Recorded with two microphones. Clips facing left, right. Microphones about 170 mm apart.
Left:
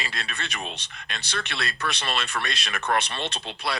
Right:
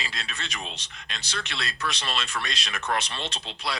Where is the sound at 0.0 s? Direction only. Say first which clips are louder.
Left 3 dB; 60° left (ahead or behind).